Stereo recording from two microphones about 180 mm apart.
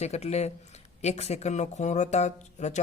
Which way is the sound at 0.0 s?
35° left (ahead or behind).